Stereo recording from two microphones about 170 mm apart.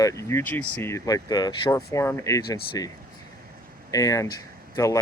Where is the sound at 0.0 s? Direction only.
15° left (ahead or behind).